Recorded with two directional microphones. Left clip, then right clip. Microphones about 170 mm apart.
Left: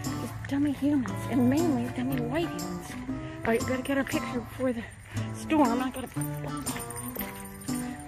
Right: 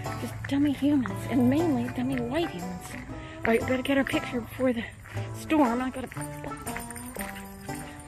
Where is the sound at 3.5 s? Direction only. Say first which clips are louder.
Right 3 dB; 25° right (ahead or behind).